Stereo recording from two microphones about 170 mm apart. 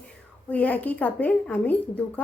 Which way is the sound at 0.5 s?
10° left (ahead or behind).